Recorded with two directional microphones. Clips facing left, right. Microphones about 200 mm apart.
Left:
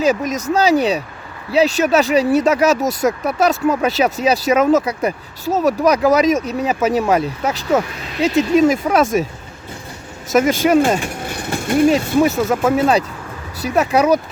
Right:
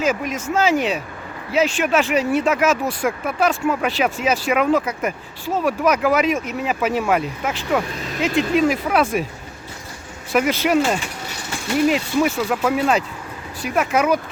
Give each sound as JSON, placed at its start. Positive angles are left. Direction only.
{"t": 0.0, "sound": "speech", "side_deg": 40}
{"t": 10.3, "sound": "speech", "side_deg": 45}